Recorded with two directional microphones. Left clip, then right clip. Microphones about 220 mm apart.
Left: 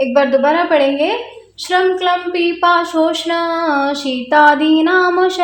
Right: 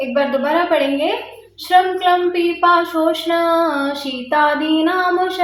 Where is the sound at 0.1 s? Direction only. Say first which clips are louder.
Left 2 dB; 40° left (ahead or behind).